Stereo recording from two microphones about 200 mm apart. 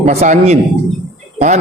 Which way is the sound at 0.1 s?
35° right (ahead or behind).